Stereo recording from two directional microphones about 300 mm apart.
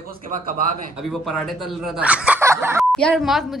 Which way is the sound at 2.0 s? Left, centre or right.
Centre.